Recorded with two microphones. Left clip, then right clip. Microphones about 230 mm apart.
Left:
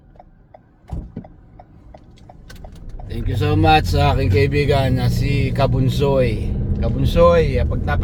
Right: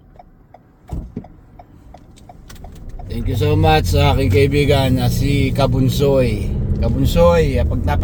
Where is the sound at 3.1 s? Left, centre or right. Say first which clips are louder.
Right 3 dB; centre.